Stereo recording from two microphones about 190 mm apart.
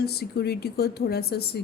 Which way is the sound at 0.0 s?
55° left (ahead or behind).